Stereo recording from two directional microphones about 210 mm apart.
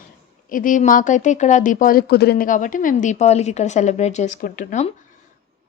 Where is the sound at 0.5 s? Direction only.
40° left (ahead or behind).